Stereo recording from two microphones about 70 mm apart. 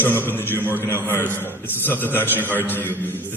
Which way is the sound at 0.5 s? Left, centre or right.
Right.